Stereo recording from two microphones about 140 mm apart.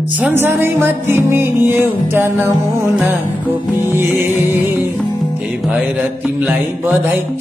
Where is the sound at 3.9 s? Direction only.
15° right (ahead or behind).